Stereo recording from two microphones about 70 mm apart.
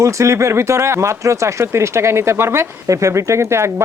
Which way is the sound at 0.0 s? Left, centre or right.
Right.